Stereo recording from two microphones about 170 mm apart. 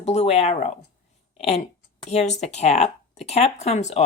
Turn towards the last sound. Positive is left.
turn(degrees=40)  # may be behind; listen again after turning